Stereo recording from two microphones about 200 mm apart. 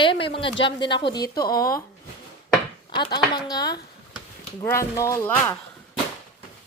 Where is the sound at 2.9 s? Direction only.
20° left (ahead or behind).